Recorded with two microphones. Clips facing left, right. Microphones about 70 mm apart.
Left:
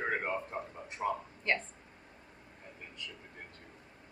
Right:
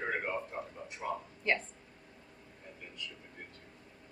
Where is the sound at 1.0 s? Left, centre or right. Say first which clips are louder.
Left 4 dB; left.